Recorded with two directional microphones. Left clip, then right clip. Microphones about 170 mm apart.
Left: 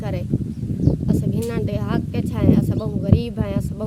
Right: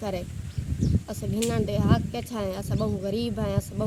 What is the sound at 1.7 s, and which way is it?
Speech, 35° left (ahead or behind).